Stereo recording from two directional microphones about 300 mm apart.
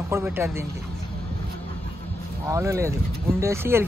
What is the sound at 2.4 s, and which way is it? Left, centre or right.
Speech, centre.